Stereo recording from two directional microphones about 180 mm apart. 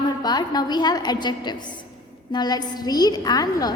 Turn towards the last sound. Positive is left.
turn(degrees=20)  # may be behind; listen again after turning